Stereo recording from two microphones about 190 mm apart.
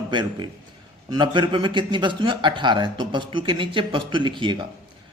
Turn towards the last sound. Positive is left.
turn(degrees=-25)  # may be behind; listen again after turning